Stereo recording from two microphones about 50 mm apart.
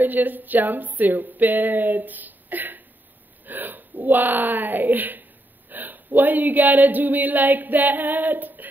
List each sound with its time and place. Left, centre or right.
0.0 s speech: right